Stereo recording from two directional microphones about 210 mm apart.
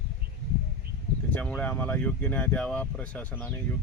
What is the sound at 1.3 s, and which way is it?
Speech, 5° left (ahead or behind).